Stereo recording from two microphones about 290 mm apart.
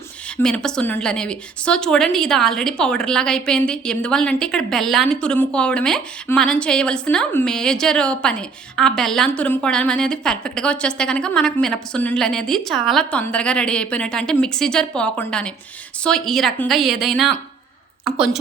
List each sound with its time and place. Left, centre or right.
0.4 s a woman's voice: centre